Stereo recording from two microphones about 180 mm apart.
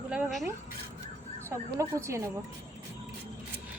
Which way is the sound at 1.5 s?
15° right (ahead or behind).